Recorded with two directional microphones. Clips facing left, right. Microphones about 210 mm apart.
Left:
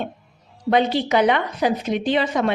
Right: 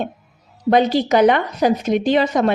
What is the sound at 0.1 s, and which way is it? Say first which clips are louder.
Music: even; 5° right (ahead or behind).